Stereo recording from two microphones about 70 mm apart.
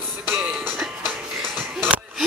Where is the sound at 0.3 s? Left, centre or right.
Right.